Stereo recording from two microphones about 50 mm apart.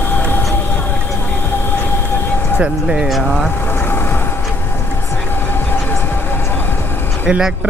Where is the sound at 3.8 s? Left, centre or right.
Left.